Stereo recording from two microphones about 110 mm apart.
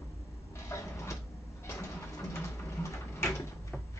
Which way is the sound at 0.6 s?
25° left (ahead or behind).